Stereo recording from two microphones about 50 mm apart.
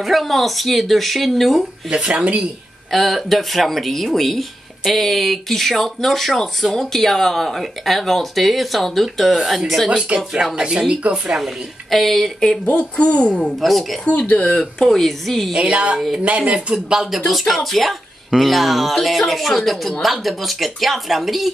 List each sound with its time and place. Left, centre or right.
0.0 s speech: centre
1.9 s speech: centre
2.9 s speech: centre
9.8 s speech: right
10.1 s speech: centre
11.9 s speech: centre
12.6 s a woman's voice: left
13.6 s speech: centre
14.0 s a woman's voice: left
14.6 s speech: centre
15.5 s speech: centre
16.7 s speech: centre
17.3 s speech: centre